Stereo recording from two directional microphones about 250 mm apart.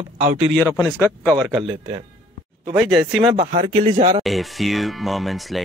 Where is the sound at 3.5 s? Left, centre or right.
Right.